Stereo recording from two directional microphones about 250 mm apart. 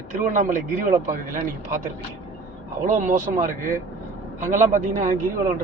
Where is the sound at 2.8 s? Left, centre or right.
Right.